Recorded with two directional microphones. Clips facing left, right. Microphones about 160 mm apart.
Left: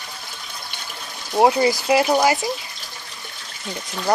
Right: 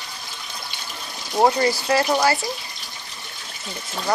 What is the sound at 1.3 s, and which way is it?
Speech, 15° left (ahead or behind).